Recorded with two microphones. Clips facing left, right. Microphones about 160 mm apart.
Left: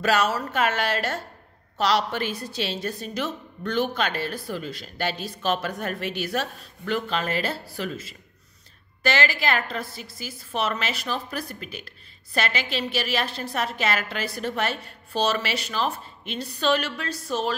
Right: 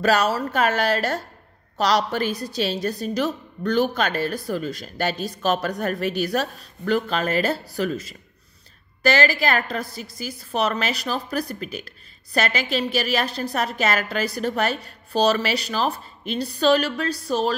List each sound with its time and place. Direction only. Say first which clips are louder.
0.0 s a woman's voice: right 3 dB; 40° right (ahead or behind)